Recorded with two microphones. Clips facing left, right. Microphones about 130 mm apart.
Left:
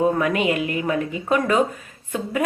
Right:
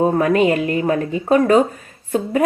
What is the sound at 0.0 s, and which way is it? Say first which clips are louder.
A woman's voice: right 5 dB; 35° right (ahead or behind).